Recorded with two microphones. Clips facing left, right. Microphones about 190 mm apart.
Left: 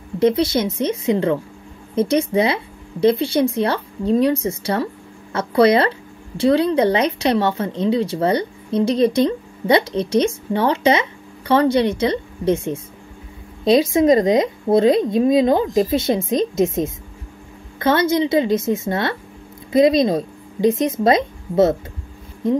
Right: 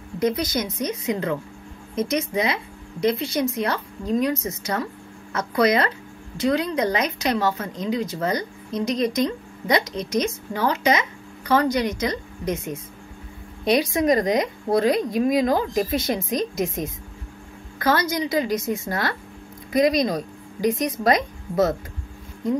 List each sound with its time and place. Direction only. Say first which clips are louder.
0.2 s speech: left 7 dB; 30° left (ahead or behind)